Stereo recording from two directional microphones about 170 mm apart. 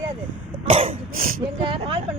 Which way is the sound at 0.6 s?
35° right (ahead or behind).